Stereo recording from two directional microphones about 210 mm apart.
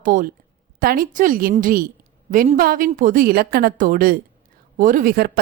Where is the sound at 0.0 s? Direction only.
40° right (ahead or behind).